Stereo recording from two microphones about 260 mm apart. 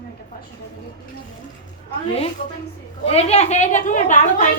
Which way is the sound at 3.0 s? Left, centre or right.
Left.